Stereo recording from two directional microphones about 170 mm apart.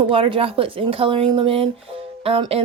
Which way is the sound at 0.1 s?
30° right (ahead or behind).